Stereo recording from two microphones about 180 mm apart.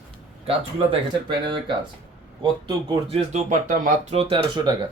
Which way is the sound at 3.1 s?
45° right (ahead or behind).